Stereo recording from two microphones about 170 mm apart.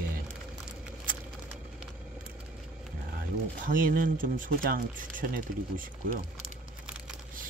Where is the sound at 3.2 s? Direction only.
55° right (ahead or behind).